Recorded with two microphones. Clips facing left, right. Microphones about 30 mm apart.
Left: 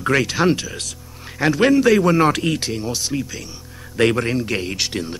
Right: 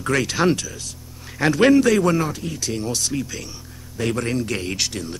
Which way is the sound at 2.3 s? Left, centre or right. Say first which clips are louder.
Left 9 dB; left.